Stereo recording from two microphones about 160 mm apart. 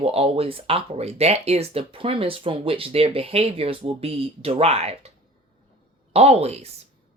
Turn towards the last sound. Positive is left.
turn(degrees=-40)  # may be behind; listen again after turning